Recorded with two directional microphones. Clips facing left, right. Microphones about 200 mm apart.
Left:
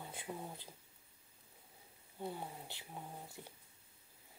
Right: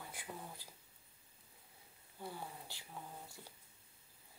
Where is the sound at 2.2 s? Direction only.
20° left (ahead or behind).